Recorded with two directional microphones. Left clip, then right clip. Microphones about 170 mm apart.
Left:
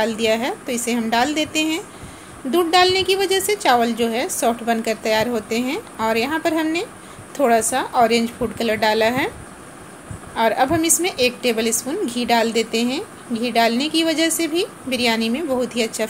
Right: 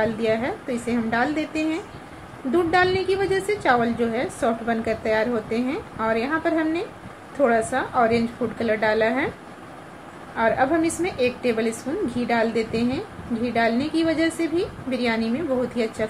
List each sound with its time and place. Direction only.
0.0 s a woman's voice: 15° left (ahead or behind)
10.3 s a woman's voice: 15° left (ahead or behind)